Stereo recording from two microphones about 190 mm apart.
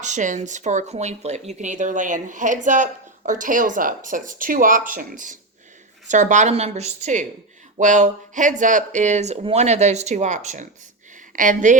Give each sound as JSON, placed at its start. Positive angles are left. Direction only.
{"t": 0.0, "sound": "a woman's voice", "side_deg": -40}